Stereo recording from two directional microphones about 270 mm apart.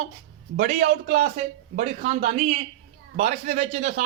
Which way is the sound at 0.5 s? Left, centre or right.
Right.